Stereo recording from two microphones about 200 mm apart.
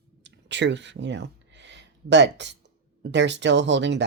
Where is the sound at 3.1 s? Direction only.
60° right (ahead or behind).